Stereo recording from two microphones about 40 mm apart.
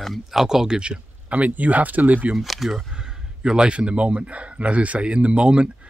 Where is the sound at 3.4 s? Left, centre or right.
Right.